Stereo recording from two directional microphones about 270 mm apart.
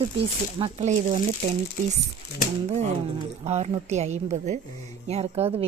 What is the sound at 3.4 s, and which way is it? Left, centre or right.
Speech, right.